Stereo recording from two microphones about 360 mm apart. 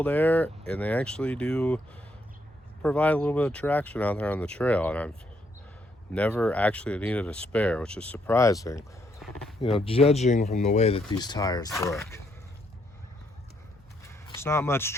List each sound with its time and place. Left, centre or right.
0.0 s speech: centre
2.8 s speech: centre
6.1 s speech: centre
9.6 s speech: centre
14.1 s a sound: centre